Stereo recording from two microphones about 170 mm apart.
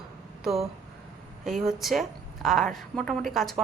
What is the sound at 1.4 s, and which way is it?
A woman's voice, centre (ahead or behind).